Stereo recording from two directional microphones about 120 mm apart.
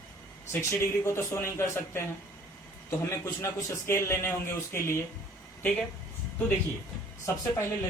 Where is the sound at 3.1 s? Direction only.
25° left (ahead or behind).